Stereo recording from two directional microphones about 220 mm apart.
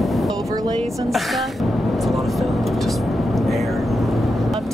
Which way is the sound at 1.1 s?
Centre (ahead or behind).